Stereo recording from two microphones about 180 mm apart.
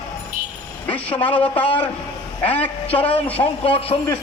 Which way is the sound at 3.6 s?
30° left (ahead or behind).